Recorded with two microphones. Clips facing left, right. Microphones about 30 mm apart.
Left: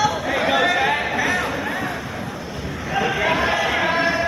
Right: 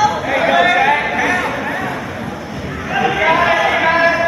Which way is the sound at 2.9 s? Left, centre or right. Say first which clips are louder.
Right 6 dB; centre.